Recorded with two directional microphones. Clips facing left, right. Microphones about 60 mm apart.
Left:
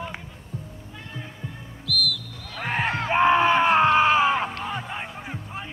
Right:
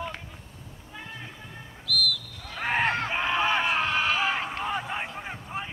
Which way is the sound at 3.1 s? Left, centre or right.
Left.